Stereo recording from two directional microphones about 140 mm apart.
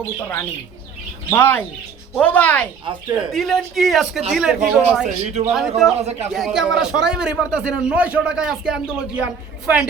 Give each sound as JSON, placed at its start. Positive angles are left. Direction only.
{"t": 0.0, "sound": "a man's voice", "side_deg": 15}
{"t": 5.0, "sound": "a man's voice", "side_deg": -55}
{"t": 5.5, "sound": "a man's voice", "side_deg": 0}
{"t": 6.0, "sound": "speech", "side_deg": -50}
{"t": 6.3, "sound": "a man's voice", "side_deg": 0}